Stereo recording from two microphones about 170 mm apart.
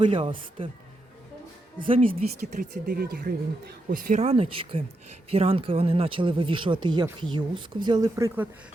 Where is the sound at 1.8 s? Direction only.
30° right (ahead or behind).